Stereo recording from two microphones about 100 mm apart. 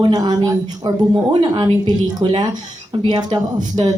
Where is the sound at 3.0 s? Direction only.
50° right (ahead or behind).